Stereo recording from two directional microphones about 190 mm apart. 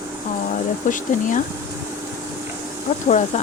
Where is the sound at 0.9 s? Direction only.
45° left (ahead or behind).